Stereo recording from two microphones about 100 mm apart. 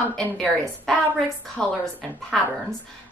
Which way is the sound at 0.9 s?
10° left (ahead or behind).